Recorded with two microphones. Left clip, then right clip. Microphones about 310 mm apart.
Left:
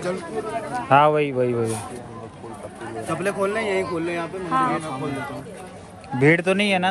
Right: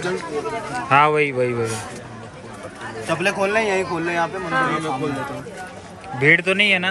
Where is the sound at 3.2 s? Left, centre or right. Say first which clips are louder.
Right 4 dB; centre.